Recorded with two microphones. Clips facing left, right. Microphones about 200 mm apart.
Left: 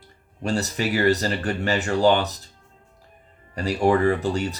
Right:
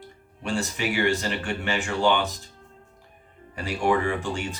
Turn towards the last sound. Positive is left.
turn(degrees=40)  # may be behind; listen again after turning